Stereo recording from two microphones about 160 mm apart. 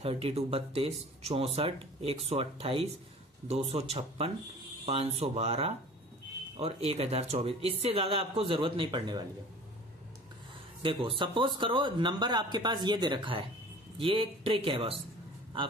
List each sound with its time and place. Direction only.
0.0 s speech: 35° right (ahead or behind)
10.8 s speech: 30° right (ahead or behind)